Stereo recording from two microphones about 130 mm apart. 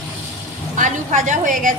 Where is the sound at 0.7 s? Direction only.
75° right (ahead or behind).